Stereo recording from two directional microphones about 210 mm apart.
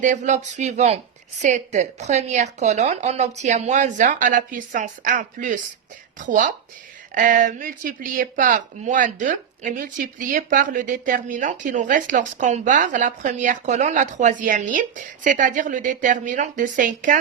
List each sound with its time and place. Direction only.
0.0 s speech: 35° right (ahead or behind)